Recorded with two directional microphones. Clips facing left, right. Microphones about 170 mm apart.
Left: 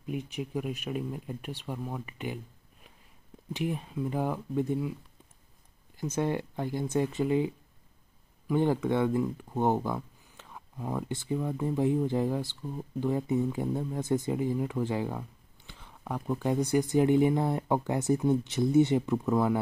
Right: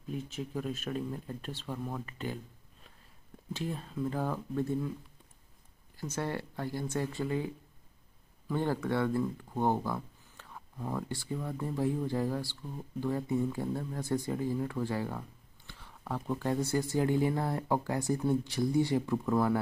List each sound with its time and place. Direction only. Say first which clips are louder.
0.0 s speech: left 3 dB; 15° left (ahead or behind)
5.9 s speech: left 5 dB; 20° left (ahead or behind)